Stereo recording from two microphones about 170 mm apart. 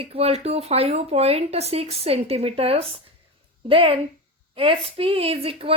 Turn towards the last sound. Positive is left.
turn(degrees=-35)  # may be behind; listen again after turning